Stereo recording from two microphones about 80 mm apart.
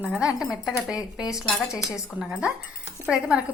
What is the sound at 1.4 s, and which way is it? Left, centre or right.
Dishes, centre.